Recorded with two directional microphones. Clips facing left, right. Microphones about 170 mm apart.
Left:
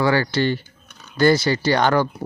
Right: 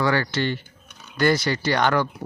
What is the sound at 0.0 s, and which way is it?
Speech, 30° left (ahead or behind).